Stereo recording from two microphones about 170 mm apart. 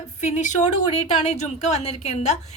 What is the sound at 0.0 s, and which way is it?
A woman's voice, 45° left (ahead or behind).